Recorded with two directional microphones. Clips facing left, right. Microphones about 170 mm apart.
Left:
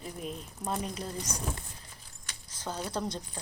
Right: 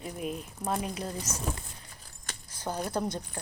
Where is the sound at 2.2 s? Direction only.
55° right (ahead or behind).